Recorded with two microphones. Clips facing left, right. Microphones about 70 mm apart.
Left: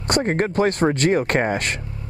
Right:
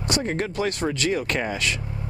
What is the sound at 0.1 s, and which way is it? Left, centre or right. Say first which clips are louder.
Speech: left 6 dB; left.